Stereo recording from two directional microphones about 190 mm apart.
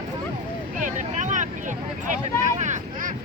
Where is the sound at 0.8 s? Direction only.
40° right (ahead or behind).